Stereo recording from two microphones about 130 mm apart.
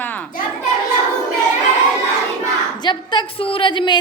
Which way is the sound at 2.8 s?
35° left (ahead or behind).